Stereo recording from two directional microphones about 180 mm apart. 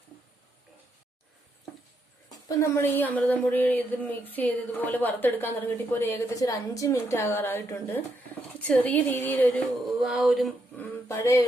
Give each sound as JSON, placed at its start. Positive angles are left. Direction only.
{"t": 2.3, "sound": "a woman's voice", "side_deg": 15}
{"t": 9.8, "sound": "a sound", "side_deg": 0}
{"t": 10.8, "sound": "speech", "side_deg": 15}